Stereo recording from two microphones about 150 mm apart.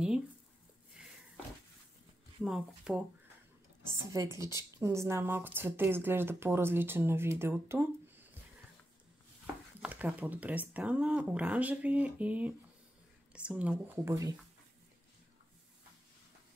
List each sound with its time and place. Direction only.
1.0 s a sound: 5° right (ahead or behind)
2.4 s speech: 5° right (ahead or behind)
4.1 s a woman's voice: 20° right (ahead or behind)
9.8 s speech: 10° right (ahead or behind)
14.0 s a woman's voice: 20° right (ahead or behind)